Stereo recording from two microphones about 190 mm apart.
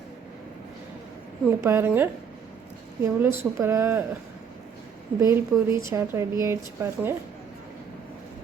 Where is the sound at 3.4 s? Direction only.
15° right (ahead or behind).